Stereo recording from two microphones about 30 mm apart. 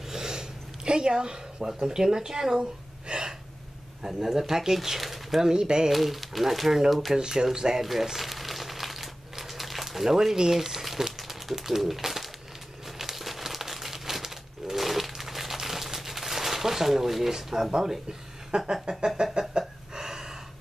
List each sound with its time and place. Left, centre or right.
0.1 s a sound: right
1.7 s speech: centre
3.1 s gasp: right
4.2 s speech: centre
5.4 s speech: right
5.9 s speech: centre
7.2 s speech: centre
7.8 s crumpling: centre
9.0 s a sound: centre
11.1 s bird: centre
12.8 s crumpling: centre
17.6 s speech: right
19.5 s gasp: centre